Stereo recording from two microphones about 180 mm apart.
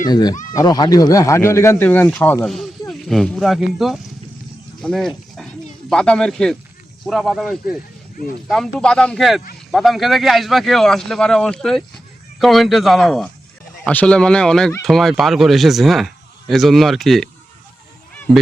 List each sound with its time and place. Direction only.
0.1 s speech: 20° left (ahead or behind); by 4.0 s centre (ahead or behind)
4.8 s a sound: centre (ahead or behind)
5.9 s speech: 5° left (ahead or behind)